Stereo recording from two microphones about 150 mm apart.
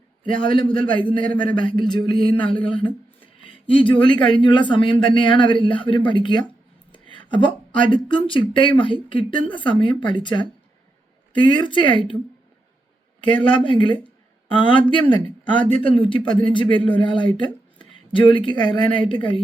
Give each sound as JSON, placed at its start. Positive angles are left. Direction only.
{"t": 0.3, "sound": "a man's voice", "side_deg": 35}
{"t": 6.9, "sound": "a sound", "side_deg": 35}
{"t": 7.9, "sound": "a man's voice", "side_deg": 35}
{"t": 13.7, "sound": "a man's voice", "side_deg": 35}